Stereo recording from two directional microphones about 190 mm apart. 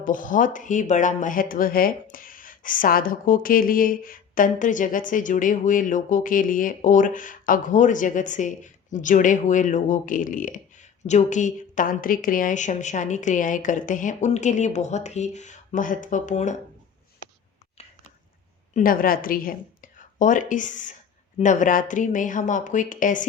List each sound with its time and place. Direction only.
0.0 s speech: 45° left (ahead or behind)
18.7 s speech: 45° left (ahead or behind)